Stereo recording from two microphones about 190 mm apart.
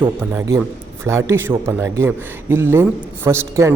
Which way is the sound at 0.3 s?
15° right (ahead or behind).